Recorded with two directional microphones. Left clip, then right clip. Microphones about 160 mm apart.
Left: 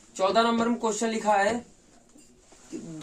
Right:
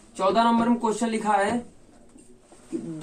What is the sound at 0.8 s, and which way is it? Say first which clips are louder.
Speech: right 2 dB; 30° left (ahead or behind).